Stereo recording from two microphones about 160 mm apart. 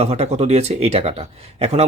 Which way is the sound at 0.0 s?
40° right (ahead or behind).